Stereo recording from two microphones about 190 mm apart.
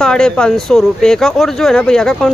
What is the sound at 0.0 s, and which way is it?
Speech, 5° left (ahead or behind).